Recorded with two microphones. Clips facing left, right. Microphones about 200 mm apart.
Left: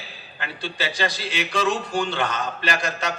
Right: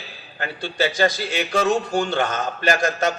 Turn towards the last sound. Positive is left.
turn(degrees=-45)  # may be behind; listen again after turning